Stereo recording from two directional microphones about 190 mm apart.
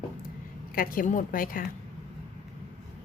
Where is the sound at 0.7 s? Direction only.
50° left (ahead or behind).